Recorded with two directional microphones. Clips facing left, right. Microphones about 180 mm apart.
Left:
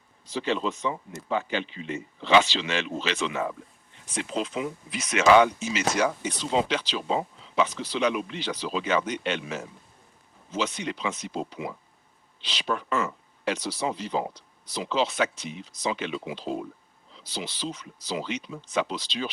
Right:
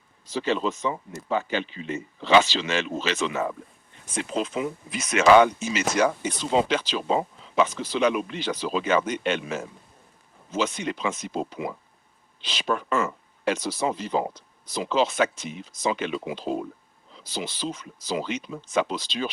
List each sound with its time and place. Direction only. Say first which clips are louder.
0.3 s speech: right 2 dB; 45° right (ahead or behind)